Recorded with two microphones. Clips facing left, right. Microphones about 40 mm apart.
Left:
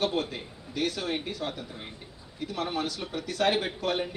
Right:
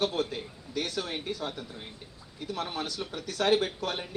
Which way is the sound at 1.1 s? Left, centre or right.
Centre.